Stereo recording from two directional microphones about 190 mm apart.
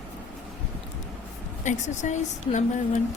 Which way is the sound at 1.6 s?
40° left (ahead or behind).